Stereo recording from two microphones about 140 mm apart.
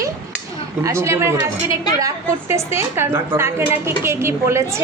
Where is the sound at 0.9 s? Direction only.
20° right (ahead or behind).